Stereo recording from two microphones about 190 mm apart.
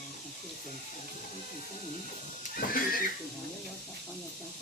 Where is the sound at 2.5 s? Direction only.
50° left (ahead or behind).